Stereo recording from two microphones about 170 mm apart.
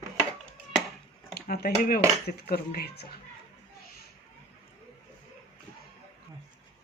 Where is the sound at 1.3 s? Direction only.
65° left (ahead or behind).